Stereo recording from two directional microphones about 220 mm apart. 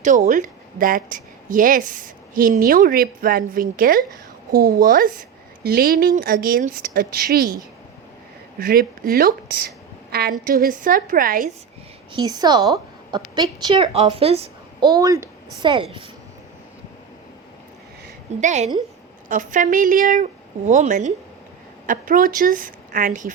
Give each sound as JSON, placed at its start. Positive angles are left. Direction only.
{"t": 0.0, "sound": "a woman's voice", "side_deg": -35}
{"t": 12.2, "sound": "a woman's voice", "side_deg": -20}
{"t": 12.7, "sound": "a sound", "side_deg": -20}
{"t": 13.3, "sound": "a woman's voice", "side_deg": -20}
{"t": 18.3, "sound": "a woman's voice", "side_deg": -30}